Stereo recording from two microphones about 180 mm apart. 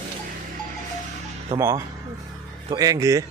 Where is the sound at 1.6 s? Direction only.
15° right (ahead or behind).